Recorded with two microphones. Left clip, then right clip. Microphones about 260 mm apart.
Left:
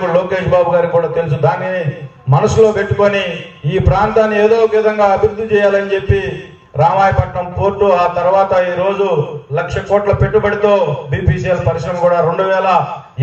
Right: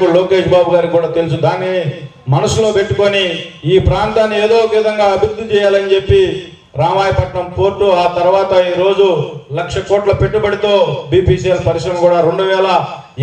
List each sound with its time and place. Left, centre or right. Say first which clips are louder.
0.1 s a man's voice: right 3 dB; right
7.6 s a man's voice: even; right